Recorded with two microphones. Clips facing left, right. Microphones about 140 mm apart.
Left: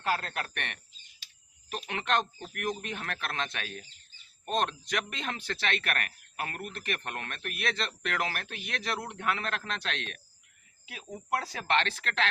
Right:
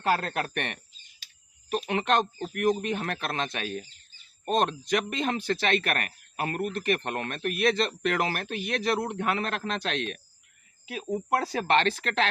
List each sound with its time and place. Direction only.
0.0 s speech: 45° right (ahead or behind)